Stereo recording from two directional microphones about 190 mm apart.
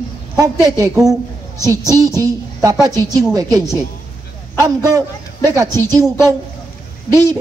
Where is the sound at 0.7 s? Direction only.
20° right (ahead or behind).